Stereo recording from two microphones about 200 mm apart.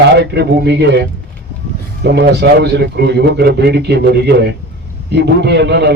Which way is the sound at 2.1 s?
55° right (ahead or behind).